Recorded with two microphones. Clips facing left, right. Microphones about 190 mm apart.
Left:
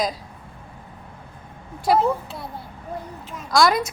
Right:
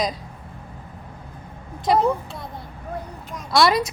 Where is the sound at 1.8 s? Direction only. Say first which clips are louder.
Even; 5° left (ahead or behind).